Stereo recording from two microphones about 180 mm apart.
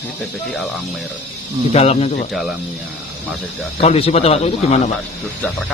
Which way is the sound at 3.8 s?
35° left (ahead or behind).